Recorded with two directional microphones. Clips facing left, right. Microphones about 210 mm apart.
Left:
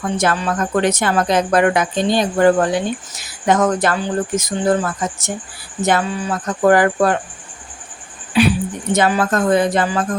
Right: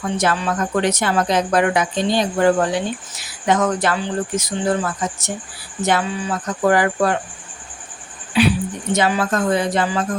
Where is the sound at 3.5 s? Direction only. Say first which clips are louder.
Left 2 dB; 45° left (ahead or behind).